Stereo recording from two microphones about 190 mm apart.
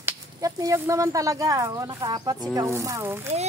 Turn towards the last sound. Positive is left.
turn(degrees=-15)  # may be behind; listen again after turning